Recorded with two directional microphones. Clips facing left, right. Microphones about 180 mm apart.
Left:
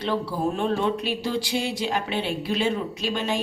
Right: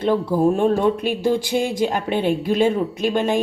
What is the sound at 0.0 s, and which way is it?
Speech, 50° right (ahead or behind).